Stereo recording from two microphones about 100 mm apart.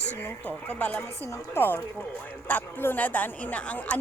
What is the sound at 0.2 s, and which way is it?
A woman's voice, 20° left (ahead or behind).